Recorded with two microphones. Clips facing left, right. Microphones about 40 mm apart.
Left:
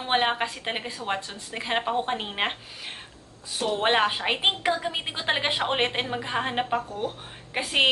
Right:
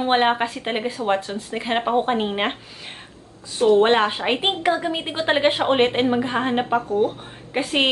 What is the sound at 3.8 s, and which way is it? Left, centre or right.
A woman's voice, centre.